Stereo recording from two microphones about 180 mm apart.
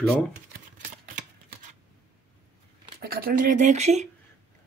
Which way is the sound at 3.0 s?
55° right (ahead or behind).